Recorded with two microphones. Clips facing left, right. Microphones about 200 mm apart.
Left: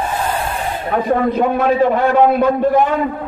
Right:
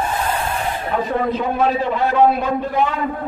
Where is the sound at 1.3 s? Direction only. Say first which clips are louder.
Left 4 dB; 50° left (ahead or behind).